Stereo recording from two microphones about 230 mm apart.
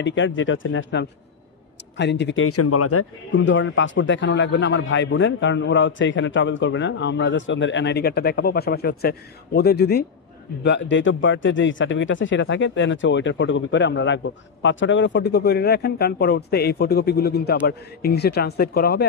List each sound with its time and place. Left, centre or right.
0.0 s speech: left
3.3 s speech: left